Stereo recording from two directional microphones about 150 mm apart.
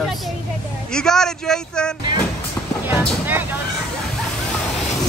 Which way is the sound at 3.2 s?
15° right (ahead or behind).